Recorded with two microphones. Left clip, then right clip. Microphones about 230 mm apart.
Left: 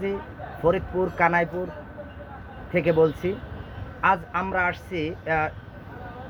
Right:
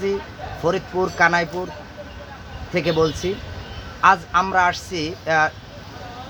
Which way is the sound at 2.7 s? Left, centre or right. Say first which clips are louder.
Right 1 dB; centre.